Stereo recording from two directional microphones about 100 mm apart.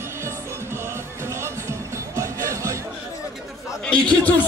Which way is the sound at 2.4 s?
30° right (ahead or behind).